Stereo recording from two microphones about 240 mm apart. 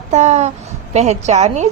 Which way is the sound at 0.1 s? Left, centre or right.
Right.